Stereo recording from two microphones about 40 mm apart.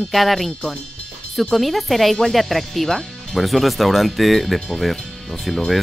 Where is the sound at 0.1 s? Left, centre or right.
Centre.